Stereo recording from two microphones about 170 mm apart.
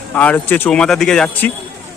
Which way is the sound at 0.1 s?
10° left (ahead or behind).